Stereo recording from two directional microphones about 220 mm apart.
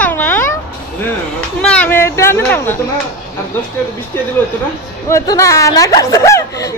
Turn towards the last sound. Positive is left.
turn(degrees=15)  # may be behind; listen again after turning